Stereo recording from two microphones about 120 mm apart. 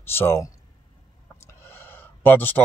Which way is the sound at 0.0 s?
20° left (ahead or behind).